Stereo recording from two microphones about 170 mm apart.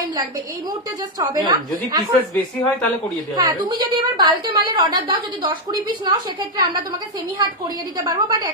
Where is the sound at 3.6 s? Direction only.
25° right (ahead or behind).